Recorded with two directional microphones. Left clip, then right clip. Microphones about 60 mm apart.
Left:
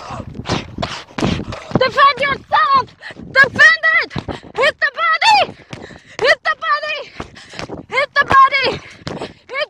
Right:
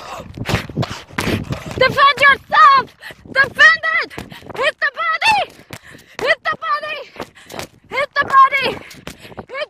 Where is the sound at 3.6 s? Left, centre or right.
Centre.